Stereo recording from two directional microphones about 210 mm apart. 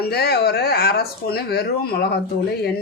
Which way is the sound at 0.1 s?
50° left (ahead or behind).